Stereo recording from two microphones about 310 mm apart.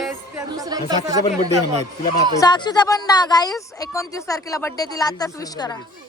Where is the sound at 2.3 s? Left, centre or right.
Centre.